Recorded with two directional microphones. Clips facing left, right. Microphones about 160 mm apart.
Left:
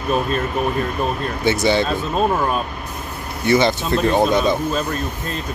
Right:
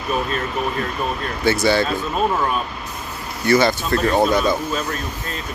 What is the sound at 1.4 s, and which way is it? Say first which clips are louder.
Speech: even; 20° left (ahead or behind).